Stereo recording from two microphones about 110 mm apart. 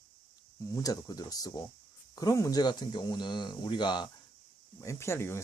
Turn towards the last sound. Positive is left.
turn(degrees=25)  # may be behind; listen again after turning